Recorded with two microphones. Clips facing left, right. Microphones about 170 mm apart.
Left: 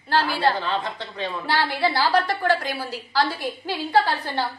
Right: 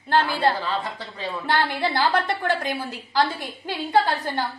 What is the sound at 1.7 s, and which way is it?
A woman's voice, 20° right (ahead or behind).